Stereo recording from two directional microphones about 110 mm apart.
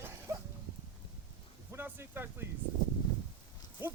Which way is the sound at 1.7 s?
20° right (ahead or behind).